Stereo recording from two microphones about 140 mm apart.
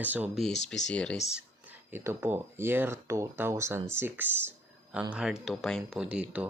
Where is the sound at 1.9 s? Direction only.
15° right (ahead or behind).